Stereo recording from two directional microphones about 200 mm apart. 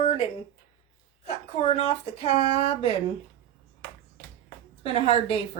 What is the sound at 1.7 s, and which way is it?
Speech, 30° left (ahead or behind).